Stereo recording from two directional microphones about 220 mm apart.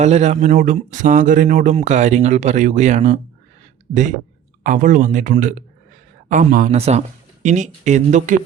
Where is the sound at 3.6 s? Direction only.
35° right (ahead or behind).